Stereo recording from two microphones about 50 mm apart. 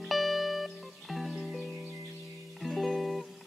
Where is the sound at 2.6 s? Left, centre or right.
Centre.